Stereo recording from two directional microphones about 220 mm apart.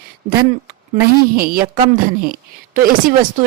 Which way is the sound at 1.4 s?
40° right (ahead or behind).